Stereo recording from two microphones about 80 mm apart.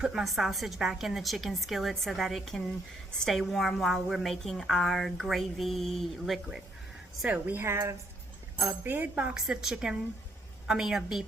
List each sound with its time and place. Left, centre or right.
0.0 s a woman's voice: centre
7.3 s a woman's voice: right; by 11.3 s centre